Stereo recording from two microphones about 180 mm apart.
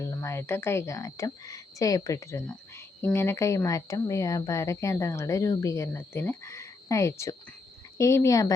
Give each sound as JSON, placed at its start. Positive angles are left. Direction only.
{"t": 0.0, "sound": "speech", "side_deg": 15}